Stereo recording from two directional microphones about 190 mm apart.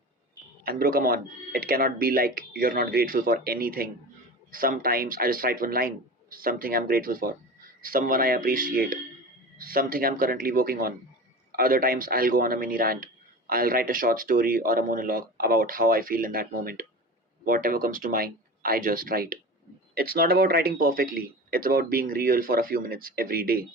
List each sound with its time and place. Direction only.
0.6 s speech: 50° right (ahead or behind)